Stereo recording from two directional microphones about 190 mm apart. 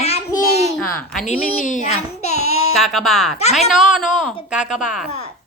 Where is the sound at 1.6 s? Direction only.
40° left (ahead or behind).